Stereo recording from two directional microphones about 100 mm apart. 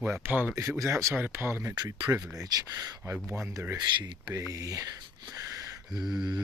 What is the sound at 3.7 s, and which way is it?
Speech, 50° right (ahead or behind).